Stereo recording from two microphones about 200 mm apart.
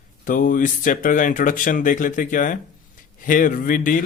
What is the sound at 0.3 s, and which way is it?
A man's voice, 40° left (ahead or behind).